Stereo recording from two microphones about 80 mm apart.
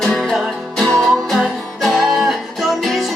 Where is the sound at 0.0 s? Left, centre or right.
Centre.